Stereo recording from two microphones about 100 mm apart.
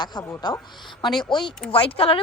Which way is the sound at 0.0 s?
45° left (ahead or behind).